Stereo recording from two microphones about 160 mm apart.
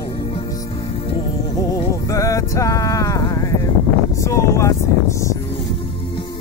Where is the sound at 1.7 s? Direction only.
20° left (ahead or behind).